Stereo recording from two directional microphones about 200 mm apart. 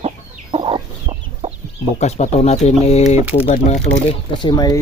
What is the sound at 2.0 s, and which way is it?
Speech, 35° left (ahead or behind).